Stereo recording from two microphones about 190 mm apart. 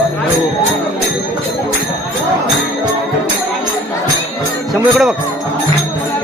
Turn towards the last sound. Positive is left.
turn(degrees=0)  # may be behind; listen again after turning